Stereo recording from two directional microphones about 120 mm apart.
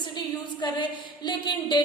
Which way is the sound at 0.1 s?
40° left (ahead or behind).